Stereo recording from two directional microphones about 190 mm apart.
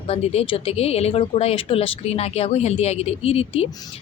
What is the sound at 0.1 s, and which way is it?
Speech, 30° left (ahead or behind).